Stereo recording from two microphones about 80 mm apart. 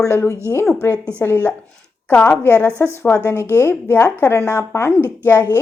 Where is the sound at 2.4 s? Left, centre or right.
Left.